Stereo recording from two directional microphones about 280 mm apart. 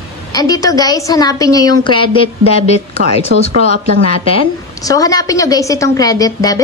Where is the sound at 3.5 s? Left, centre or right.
Right.